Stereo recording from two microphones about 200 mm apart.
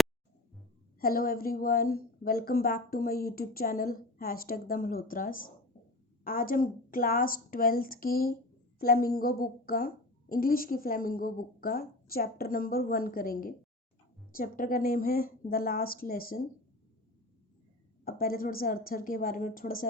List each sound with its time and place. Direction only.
0.9 s a woman's voice: 45° left (ahead or behind)
18.0 s a woman's voice: 50° left (ahead or behind)